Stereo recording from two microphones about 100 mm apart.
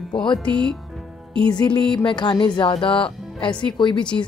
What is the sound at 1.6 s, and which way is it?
A woman's voice, 50° left (ahead or behind).